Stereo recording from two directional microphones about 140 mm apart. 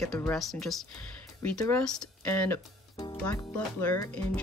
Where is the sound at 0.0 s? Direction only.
Centre (ahead or behind).